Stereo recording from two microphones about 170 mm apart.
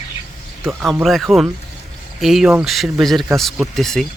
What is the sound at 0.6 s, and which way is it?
Speech, 5° right (ahead or behind).